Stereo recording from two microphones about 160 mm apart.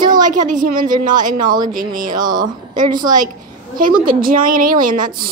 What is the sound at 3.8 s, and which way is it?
A woman's voice, 60° right (ahead or behind).